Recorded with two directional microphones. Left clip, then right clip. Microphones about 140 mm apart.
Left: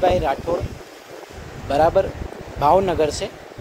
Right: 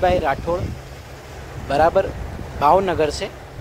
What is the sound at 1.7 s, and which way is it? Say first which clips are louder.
Speech: even; centre (ahead or behind).